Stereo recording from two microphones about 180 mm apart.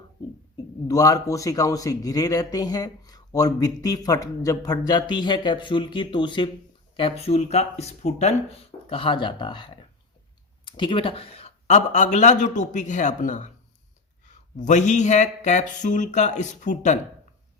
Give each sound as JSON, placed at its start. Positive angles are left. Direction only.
{"t": 0.5, "sound": "a man's voice", "side_deg": 20}
{"t": 14.6, "sound": "speech", "side_deg": 40}